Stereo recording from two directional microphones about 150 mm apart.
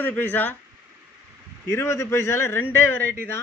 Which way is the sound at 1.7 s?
15° left (ahead or behind).